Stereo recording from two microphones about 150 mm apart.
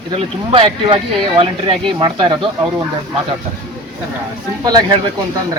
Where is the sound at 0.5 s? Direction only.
35° right (ahead or behind).